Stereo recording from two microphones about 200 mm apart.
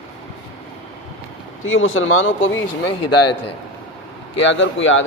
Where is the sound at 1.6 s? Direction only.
80° left.